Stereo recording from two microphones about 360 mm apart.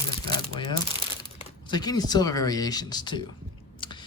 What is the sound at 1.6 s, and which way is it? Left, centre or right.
Speech, centre.